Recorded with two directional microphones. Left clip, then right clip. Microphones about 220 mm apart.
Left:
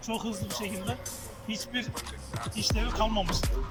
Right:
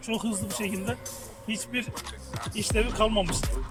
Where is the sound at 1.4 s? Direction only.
55° right (ahead or behind).